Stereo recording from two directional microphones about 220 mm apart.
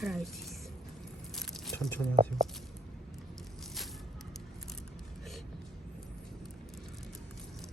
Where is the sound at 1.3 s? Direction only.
Centre (ahead or behind).